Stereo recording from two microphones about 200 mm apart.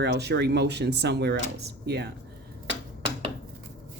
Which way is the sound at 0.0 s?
55° right (ahead or behind).